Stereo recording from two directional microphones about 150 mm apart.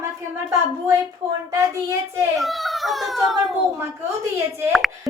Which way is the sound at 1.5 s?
20° right (ahead or behind).